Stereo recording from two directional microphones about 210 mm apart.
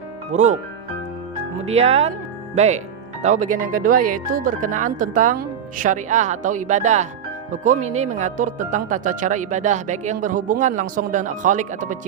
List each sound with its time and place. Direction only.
0.3 s speech: 35° right (ahead or behind)
1.6 s speech: 30° right (ahead or behind)